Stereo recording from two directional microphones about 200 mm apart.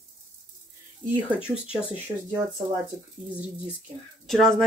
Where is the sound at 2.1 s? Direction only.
35° right (ahead or behind).